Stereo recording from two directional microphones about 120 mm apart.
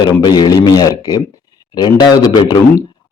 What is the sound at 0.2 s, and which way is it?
Speech, 35° left (ahead or behind).